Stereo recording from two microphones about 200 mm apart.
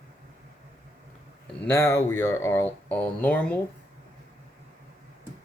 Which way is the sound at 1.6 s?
10° left (ahead or behind).